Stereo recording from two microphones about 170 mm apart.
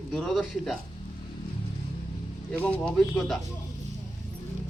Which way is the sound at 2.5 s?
10° left (ahead or behind).